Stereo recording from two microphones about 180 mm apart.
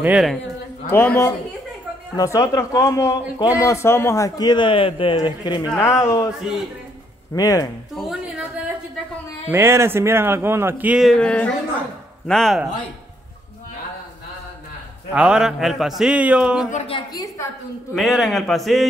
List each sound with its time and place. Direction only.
0.0 s a man's voice: 5° right (ahead or behind)
0.8 s a man's voice: 15° left (ahead or behind)
5.7 s speech: 15° left (ahead or behind)
7.3 s a man's voice: 20° left (ahead or behind)
7.9 s a sound: centre (ahead or behind)
9.5 s a man's voice: 15° right (ahead or behind); by 12.6 s centre (ahead or behind)
15.1 s a man's voice: 5° right (ahead or behind)
16.7 s a man's voice: 30° left (ahead or behind)
17.9 s a man's voice: centre (ahead or behind)